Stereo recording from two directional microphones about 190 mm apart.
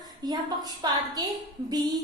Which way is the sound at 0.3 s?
20° right (ahead or behind).